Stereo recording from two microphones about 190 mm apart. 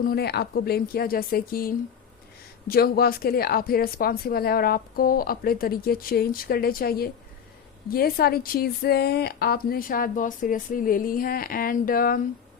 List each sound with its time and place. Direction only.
0.0 s a woman's voice: 55° left (ahead or behind)